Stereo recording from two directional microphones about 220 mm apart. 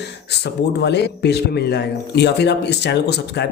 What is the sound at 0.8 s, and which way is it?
A man's voice, 50° left (ahead or behind).